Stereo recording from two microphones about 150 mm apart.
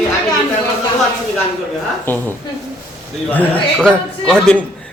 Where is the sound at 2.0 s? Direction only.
15° left (ahead or behind).